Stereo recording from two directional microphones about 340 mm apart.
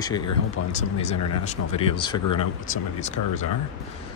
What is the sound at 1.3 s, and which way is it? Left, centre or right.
Speech, centre.